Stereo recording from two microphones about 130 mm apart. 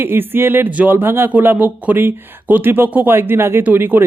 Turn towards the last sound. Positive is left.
turn(degrees=-15)  # may be behind; listen again after turning